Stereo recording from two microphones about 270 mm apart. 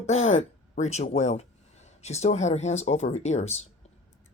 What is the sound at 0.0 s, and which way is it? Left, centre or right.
Speech, left.